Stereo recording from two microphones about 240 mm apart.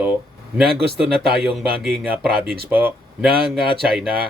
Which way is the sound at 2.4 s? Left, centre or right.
Right.